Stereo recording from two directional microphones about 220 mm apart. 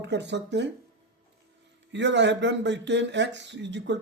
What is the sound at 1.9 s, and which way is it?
Speech, 55° right (ahead or behind).